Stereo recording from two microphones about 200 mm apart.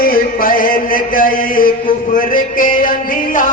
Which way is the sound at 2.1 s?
40° left (ahead or behind).